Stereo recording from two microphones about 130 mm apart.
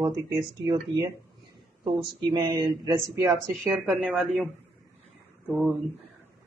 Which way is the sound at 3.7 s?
10° right (ahead or behind).